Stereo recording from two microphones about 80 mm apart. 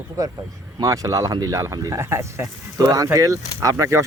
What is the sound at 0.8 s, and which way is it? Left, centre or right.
Speech, right.